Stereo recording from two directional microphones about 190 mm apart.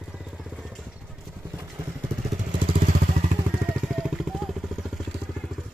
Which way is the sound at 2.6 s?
50° right (ahead or behind).